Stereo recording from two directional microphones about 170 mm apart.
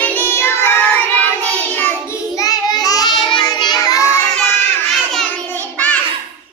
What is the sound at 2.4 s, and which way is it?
Child singing, 20° left (ahead or behind).